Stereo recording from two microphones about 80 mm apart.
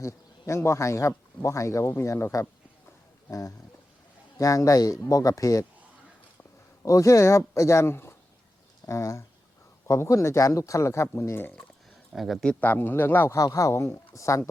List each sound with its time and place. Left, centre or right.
0.0 s speech: left
6.8 s speech: left
12.1 s speech: centre
12.5 s speech: left
13.3 s speech: left